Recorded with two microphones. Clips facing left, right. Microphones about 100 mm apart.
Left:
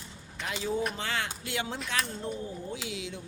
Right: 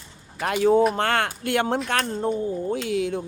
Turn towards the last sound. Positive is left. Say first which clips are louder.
# right 13 dB
turn(degrees=-55)  # may be behind; listen again after turning